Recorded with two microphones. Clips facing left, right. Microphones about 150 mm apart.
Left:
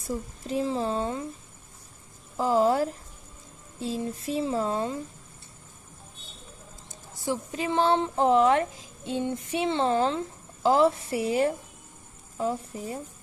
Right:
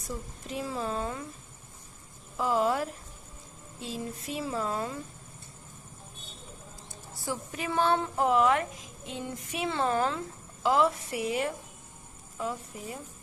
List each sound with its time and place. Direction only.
0.4 s a woman's voice: 30° left (ahead or behind)
2.4 s a woman's voice: 30° left (ahead or behind)
6.8 s a woman's voice: 20° left (ahead or behind)